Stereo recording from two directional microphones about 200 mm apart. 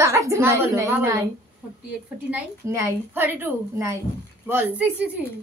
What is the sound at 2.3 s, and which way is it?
A woman's voice, 15° right (ahead or behind).